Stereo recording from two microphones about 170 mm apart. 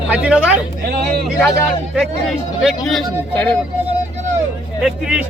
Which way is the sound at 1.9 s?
Centre (ahead or behind).